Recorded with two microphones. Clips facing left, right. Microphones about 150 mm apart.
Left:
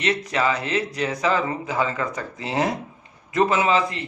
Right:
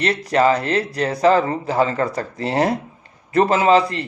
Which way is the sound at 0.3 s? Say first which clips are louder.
Right 7 dB; 35° right (ahead or behind).